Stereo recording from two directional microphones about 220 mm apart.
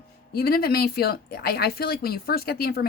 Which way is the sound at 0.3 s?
45° left (ahead or behind).